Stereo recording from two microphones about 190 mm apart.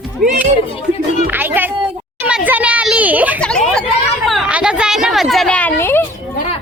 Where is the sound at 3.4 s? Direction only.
5° left (ahead or behind).